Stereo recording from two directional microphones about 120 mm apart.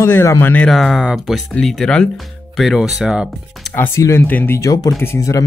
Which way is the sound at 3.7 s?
25° left (ahead or behind).